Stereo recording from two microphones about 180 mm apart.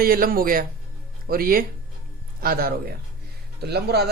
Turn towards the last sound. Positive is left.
turn(degrees=-65)  # may be behind; listen again after turning